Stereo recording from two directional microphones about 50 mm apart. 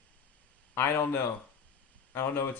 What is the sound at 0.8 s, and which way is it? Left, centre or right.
Speech, left.